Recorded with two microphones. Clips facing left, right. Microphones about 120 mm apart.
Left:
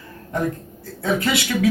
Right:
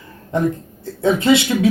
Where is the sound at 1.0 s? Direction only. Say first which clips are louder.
Right 7 dB; 25° right (ahead or behind).